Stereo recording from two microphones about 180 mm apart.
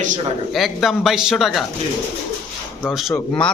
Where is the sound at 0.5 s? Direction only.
Centre (ahead or behind).